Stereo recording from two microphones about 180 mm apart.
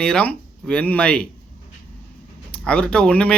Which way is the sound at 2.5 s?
5° left (ahead or behind).